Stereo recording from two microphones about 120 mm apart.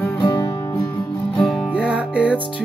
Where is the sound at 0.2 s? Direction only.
35° left (ahead or behind).